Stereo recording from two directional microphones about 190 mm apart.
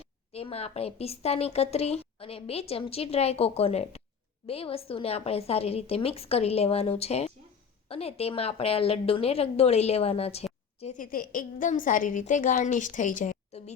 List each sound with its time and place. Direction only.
0.3 s a woman's voice: 30° left (ahead or behind)